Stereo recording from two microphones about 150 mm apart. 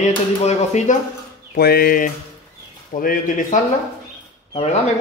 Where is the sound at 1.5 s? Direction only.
90° left.